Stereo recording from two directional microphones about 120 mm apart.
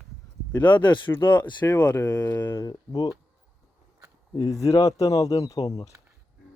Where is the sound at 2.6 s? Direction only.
35° left (ahead or behind).